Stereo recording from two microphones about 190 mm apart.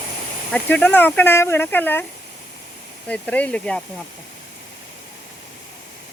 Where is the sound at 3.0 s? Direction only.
5° left (ahead or behind).